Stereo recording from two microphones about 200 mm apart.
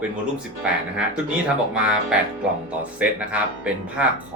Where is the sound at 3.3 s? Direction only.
5° right (ahead or behind).